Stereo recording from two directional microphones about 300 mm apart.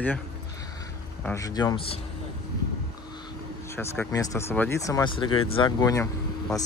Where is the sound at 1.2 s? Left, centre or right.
Centre.